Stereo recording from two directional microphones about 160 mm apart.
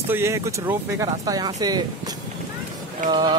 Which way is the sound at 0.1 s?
15° right (ahead or behind).